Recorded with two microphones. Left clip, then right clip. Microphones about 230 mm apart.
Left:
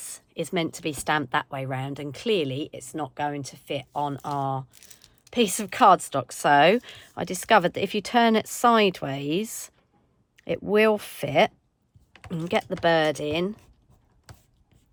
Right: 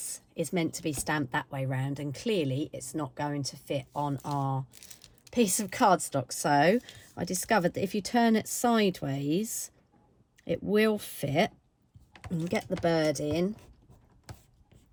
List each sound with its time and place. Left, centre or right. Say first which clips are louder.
0.0 s speech: left 2 dB; centre
4.7 s crumpling: even; centre
5.3 s speech: left 4 dB; centre
6.7 s speech: left 4 dB; centre
14.3 s a sound: right 1 dB; centre